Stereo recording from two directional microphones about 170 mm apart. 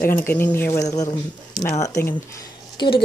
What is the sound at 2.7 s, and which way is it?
Speech, 25° left (ahead or behind).